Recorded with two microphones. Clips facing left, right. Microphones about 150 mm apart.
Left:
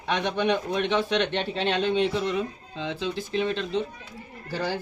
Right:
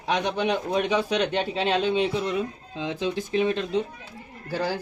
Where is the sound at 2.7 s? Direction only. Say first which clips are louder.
Right 2 dB; 15° right (ahead or behind).